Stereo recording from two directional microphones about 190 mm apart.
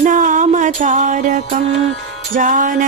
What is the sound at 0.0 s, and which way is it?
Music, 40° right (ahead or behind).